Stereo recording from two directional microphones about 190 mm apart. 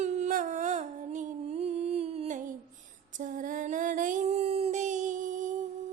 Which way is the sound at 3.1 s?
45° right (ahead or behind).